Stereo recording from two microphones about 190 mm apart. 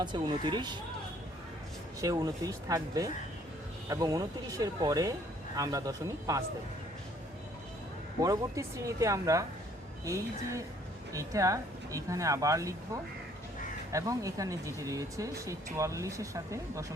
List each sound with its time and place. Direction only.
0.0 s speech: 25° right (ahead or behind)
2.0 s speech: 20° right (ahead or behind)
8.2 s speech: 15° right (ahead or behind)
11.1 s speech: 15° right (ahead or behind)